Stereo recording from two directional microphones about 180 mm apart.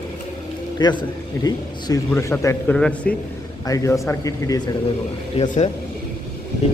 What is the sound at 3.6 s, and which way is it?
Speech, 20° left (ahead or behind).